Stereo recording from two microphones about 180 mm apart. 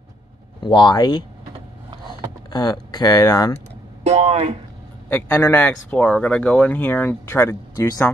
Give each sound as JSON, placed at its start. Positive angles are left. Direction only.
{"t": 0.6, "sound": "speech", "side_deg": 25}
{"t": 2.5, "sound": "speech", "side_deg": 20}
{"t": 4.0, "sound": "speech", "side_deg": -40}
{"t": 5.1, "sound": "speech", "side_deg": 10}